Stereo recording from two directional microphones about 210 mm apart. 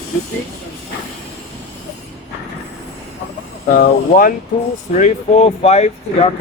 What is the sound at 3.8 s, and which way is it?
Speech, 45° left (ahead or behind).